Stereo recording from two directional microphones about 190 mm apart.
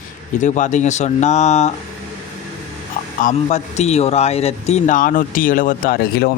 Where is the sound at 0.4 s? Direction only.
40° left (ahead or behind).